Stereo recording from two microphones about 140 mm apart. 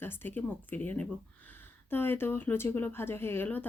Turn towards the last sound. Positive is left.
turn(degrees=15)  # may be behind; listen again after turning